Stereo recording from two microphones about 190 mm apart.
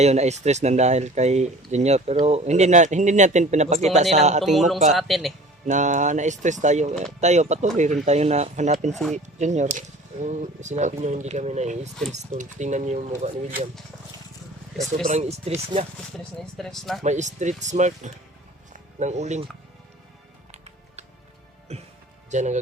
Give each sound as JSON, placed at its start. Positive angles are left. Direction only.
{"t": 0.0, "sound": "speech", "side_deg": -35}
{"t": 4.5, "sound": "speech", "side_deg": 0}
{"t": 5.6, "sound": "speech", "side_deg": -40}
{"t": 15.0, "sound": "speech", "side_deg": -35}
{"t": 16.1, "sound": "speech", "side_deg": 0}
{"t": 17.0, "sound": "speech", "side_deg": -40}
{"t": 20.5, "sound": "music", "side_deg": -35}
{"t": 21.7, "sound": "speech", "side_deg": -35}